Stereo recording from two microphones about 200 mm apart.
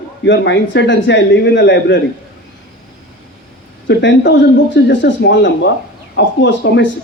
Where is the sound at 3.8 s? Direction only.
60° left (ahead or behind).